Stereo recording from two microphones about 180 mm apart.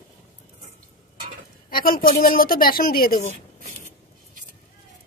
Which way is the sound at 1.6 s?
50° left (ahead or behind).